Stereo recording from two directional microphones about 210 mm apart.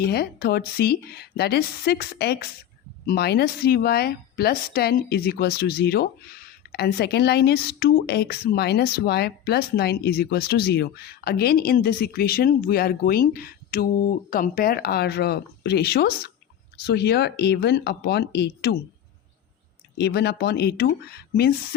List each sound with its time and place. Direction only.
0.0 s speech: 50° left (ahead or behind)
20.0 s speech: 55° left (ahead or behind)